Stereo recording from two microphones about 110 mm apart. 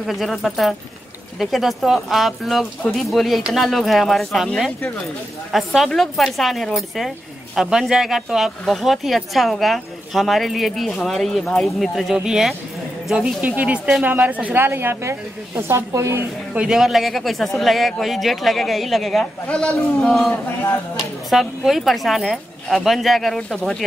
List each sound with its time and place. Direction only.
0.0 s a woman's voice: centre (ahead or behind); by 16.3 s 25° right (ahead or behind)
16.5 s speech: 5° right (ahead or behind)
20.4 s speech: 25° left (ahead or behind)
20.9 s speech: centre (ahead or behind)